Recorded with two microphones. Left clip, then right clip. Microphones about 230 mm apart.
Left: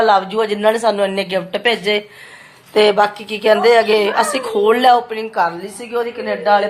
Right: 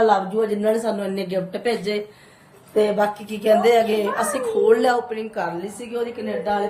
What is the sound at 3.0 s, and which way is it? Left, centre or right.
A woman's voice, centre.